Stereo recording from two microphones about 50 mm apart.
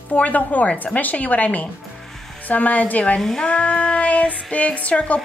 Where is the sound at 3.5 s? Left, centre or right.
Centre.